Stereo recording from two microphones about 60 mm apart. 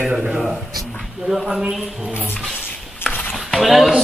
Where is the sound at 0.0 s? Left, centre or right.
Centre.